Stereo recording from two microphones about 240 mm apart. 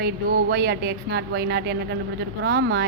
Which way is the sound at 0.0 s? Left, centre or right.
Right.